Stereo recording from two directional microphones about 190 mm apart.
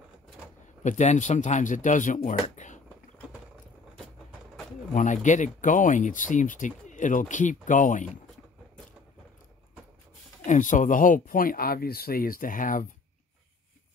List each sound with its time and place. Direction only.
0.8 s speech: 40° left (ahead or behind)
4.9 s speech: 40° left (ahead or behind)
10.4 s speech: 40° left (ahead or behind)